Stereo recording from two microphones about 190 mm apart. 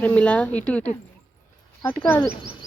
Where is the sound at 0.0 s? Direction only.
5° left (ahead or behind).